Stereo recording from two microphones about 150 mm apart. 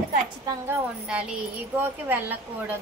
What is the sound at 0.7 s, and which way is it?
A child's voice, 5° right (ahead or behind).